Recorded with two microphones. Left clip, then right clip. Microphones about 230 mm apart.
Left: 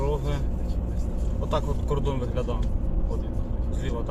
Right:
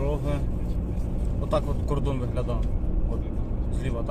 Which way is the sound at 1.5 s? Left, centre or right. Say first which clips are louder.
Right 1 dB; right.